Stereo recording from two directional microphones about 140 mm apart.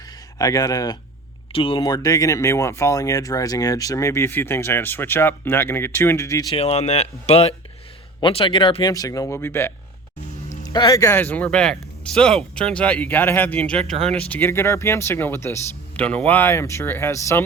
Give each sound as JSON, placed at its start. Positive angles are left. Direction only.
{"t": 0.3, "sound": "speech", "side_deg": 25}
{"t": 1.5, "sound": "speech", "side_deg": 35}
{"t": 6.5, "sound": "speech", "side_deg": 45}